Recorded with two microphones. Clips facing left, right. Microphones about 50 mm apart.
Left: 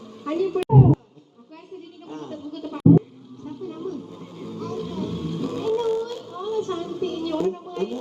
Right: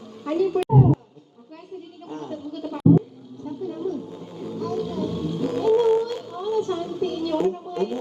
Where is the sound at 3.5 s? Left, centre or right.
Left.